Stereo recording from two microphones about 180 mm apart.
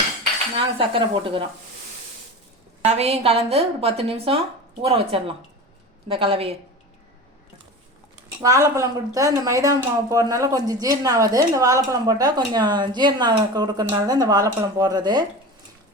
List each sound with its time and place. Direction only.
0.5 s a woman's voice: 30° right (ahead or behind)
2.8 s a woman's voice: 35° right (ahead or behind)
8.4 s a woman's voice: 15° right (ahead or behind)